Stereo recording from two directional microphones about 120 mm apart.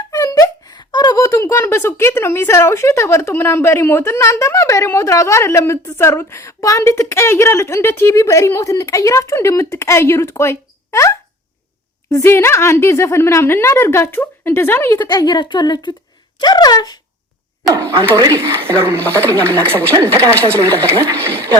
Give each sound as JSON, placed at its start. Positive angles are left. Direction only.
{"t": 0.1, "sound": "speech", "side_deg": 30}
{"t": 15.1, "sound": "a woman's voice", "side_deg": 35}
{"t": 17.6, "sound": "speech", "side_deg": -5}
{"t": 18.5, "sound": "speech", "side_deg": 10}
{"t": 19.6, "sound": "a woman's voice", "side_deg": -20}
{"t": 20.3, "sound": "speech", "side_deg": 15}